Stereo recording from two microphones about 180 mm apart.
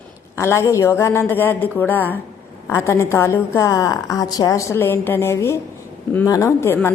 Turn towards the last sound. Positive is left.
turn(degrees=15)  # may be behind; listen again after turning